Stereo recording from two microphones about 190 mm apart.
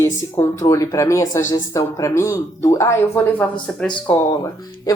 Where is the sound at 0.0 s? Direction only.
15° left (ahead or behind).